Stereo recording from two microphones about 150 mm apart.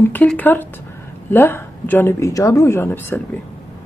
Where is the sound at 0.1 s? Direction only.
10° left (ahead or behind).